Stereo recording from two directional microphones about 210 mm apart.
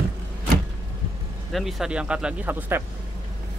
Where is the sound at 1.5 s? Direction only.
Centre (ahead or behind).